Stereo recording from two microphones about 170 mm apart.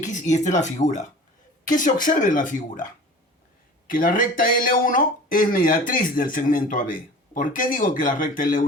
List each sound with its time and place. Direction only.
0.0 s speech: 45° left (ahead or behind)
3.8 s speech: 55° left (ahead or behind)